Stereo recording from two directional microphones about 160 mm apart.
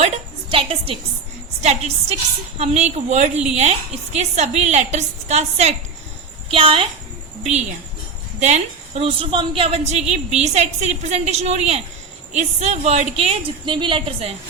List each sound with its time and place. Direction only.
0.5 s a woman's voice: 35° right (ahead or behind)
8.4 s a woman's voice: 45° right (ahead or behind)